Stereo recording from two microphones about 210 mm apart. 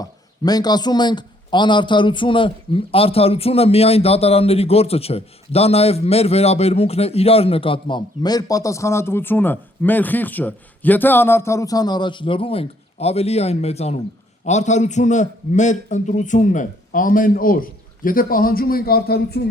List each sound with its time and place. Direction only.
0.0 s a man's voice: 20° left (ahead or behind); by 19.4 s 50° left (ahead or behind)